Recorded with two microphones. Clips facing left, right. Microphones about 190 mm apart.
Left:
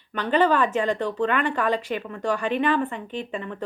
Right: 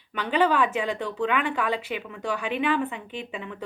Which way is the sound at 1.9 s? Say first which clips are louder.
Left 4 dB; 45° left (ahead or behind).